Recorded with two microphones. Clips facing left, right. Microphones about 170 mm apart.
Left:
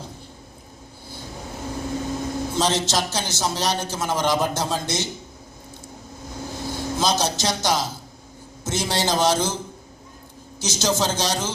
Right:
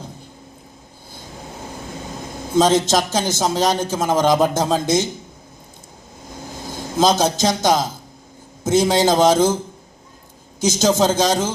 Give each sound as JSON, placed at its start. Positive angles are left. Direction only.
{"t": 2.5, "sound": "a man's voice", "side_deg": -50}
{"t": 6.7, "sound": "a man's voice", "side_deg": -50}
{"t": 10.6, "sound": "a man's voice", "side_deg": -50}